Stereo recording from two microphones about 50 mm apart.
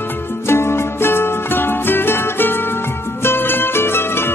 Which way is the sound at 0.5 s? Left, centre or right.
Left.